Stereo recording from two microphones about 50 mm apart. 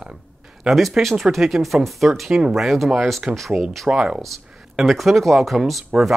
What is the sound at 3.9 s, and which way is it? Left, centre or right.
Speech, centre.